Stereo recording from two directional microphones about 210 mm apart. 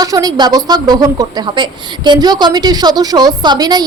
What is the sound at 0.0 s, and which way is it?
A woman's voice, 15° right (ahead or behind).